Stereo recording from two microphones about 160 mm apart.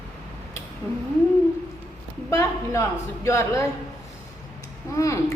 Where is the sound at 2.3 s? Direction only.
20° left (ahead or behind).